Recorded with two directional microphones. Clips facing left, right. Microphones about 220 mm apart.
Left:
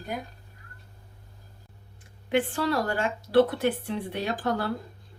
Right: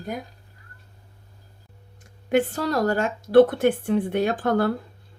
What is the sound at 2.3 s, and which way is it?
Speech, 40° right (ahead or behind).